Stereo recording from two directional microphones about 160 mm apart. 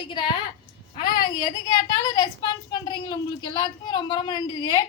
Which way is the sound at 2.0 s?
25° left (ahead or behind).